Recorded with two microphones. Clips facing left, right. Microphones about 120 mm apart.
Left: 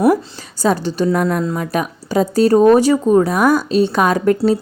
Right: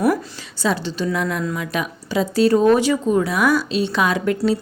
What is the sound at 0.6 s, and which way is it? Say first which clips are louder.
Speech: left 5 dB; 45° left (ahead or behind).